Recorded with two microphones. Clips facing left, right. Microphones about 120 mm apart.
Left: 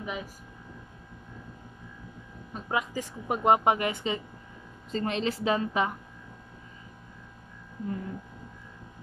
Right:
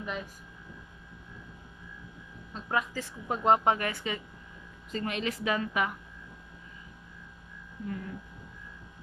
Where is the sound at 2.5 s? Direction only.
15° left (ahead or behind); by 5.9 s 30° left (ahead or behind).